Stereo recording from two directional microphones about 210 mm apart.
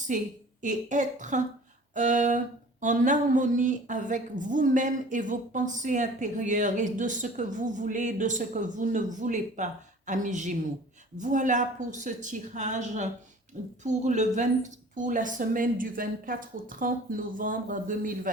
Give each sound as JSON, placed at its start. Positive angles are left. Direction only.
{"t": 0.1, "sound": "a woman's voice", "side_deg": -40}